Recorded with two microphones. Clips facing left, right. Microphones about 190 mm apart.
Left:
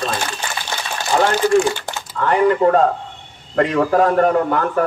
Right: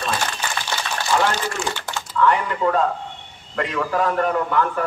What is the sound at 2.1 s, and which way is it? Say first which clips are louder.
A man's voice: left 5 dB; 45° left (ahead or behind).